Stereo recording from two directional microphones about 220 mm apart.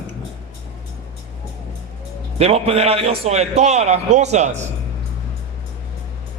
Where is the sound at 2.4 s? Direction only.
30° right (ahead or behind).